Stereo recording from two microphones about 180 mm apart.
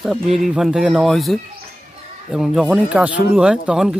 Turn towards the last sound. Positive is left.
turn(degrees=-5)  # may be behind; listen again after turning